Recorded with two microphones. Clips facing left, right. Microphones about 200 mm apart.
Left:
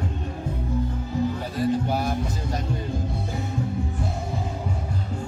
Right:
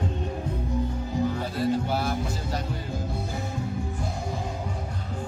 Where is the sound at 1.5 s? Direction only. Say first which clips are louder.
Left 3 dB; 15° left (ahead or behind).